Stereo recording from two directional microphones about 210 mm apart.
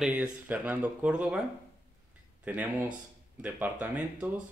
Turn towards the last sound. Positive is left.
turn(degrees=-5)  # may be behind; listen again after turning